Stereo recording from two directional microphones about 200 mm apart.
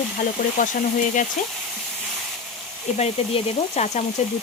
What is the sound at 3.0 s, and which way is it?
Speech, 35° left (ahead or behind).